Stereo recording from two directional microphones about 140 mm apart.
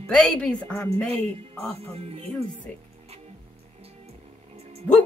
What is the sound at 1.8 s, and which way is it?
Speech, 45° right (ahead or behind).